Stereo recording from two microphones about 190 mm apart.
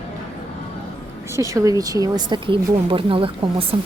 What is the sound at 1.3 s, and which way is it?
Speech, 15° right (ahead or behind).